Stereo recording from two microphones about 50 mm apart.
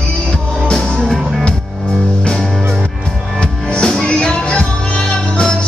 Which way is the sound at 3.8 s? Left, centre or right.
Centre.